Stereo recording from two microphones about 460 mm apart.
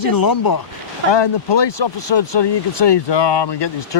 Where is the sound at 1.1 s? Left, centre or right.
Left.